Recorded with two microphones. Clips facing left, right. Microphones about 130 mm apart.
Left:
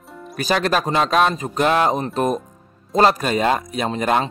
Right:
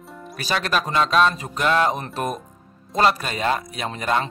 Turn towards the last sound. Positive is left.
turn(degrees=50)  # may be behind; listen again after turning